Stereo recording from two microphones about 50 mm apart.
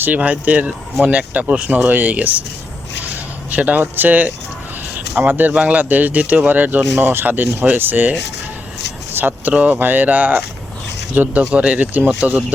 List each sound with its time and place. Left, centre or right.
0.2 s speech: right
3.5 s speech: right
5.5 s speech: right
7.0 s speech: right
9.1 s speech: right